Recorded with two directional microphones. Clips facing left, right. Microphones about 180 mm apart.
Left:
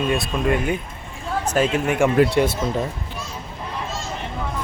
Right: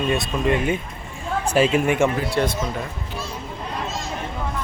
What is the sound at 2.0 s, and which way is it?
Speech, 15° left (ahead or behind).